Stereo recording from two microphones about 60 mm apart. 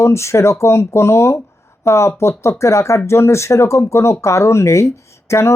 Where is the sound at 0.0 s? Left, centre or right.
Left.